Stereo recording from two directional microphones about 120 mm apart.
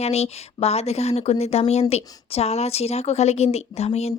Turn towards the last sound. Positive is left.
turn(degrees=60)  # may be behind; listen again after turning